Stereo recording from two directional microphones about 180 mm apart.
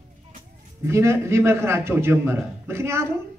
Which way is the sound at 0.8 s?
15° right (ahead or behind).